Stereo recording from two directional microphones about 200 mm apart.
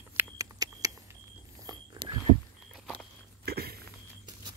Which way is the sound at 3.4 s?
50° right (ahead or behind).